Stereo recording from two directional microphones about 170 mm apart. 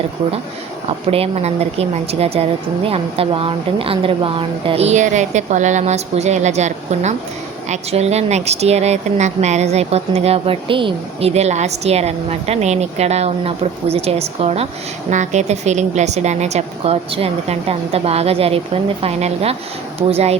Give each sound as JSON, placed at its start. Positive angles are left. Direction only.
{"t": 1.1, "sound": "speech", "side_deg": -35}